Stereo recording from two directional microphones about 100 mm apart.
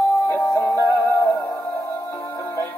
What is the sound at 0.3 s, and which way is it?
Music, 35° left (ahead or behind).